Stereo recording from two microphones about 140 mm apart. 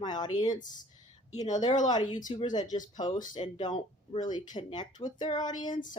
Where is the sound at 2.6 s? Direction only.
65° left (ahead or behind).